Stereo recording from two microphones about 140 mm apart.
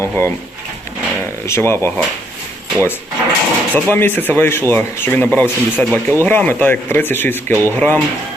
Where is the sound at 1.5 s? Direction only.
20° left (ahead or behind).